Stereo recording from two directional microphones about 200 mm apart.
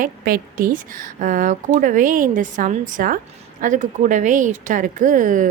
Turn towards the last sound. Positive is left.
turn(degrees=-40)  # may be behind; listen again after turning